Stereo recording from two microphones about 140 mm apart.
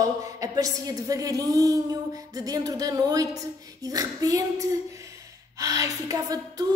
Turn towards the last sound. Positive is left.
turn(degrees=-25)  # may be behind; listen again after turning